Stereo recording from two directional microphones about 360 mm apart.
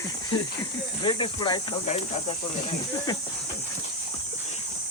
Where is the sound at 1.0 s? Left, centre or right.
Centre.